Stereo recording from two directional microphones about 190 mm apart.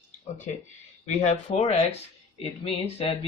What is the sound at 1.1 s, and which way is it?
Speech, 35° left (ahead or behind).